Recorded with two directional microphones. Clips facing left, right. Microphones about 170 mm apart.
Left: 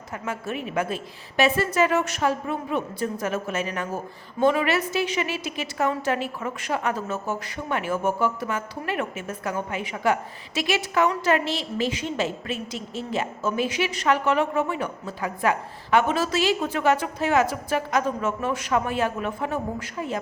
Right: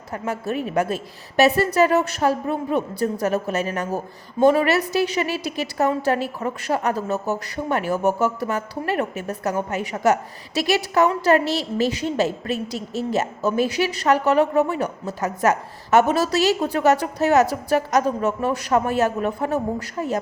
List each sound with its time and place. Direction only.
0.1 s a woman's voice: 40° right (ahead or behind)